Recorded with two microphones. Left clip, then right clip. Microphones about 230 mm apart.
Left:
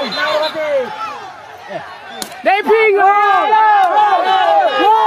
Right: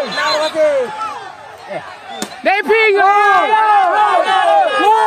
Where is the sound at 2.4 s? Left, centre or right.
Right.